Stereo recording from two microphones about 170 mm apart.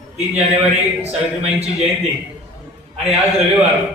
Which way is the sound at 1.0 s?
40° right (ahead or behind).